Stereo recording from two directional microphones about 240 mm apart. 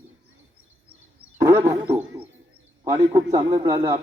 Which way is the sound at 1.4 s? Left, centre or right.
Centre.